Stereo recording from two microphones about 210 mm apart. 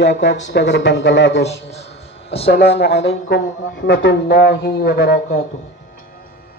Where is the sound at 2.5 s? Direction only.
50° left (ahead or behind).